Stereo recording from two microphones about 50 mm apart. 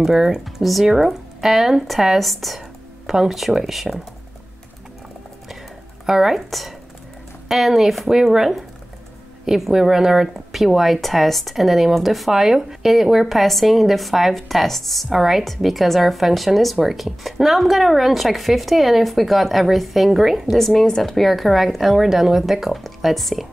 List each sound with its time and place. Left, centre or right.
0.0 s speech: centre
6.0 s speech: centre